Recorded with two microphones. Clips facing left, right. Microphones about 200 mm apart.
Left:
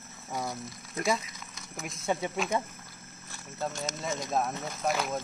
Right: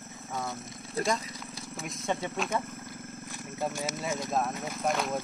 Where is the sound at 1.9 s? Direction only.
5° left (ahead or behind).